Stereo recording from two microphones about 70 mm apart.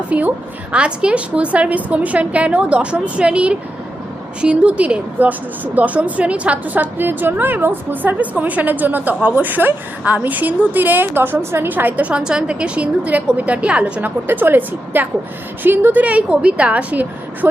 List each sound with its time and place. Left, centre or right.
0.1 s a woman's voice: centre
14.3 s a woman's voice: right